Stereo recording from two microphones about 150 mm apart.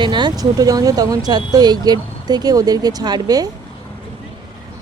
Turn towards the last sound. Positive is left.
turn(degrees=-25)  # may be behind; listen again after turning